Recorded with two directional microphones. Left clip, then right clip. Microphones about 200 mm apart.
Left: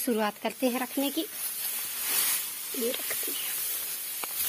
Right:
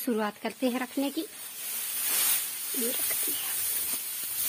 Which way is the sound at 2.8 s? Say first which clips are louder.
Left 2 dB; 10° right (ahead or behind).